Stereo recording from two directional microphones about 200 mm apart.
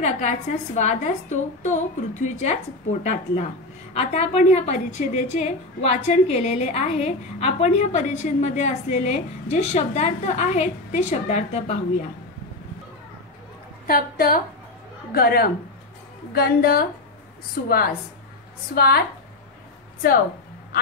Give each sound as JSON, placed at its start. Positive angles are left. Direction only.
{"t": 0.0, "sound": "a woman's voice", "side_deg": 35}
{"t": 13.8, "sound": "a woman's voice", "side_deg": 45}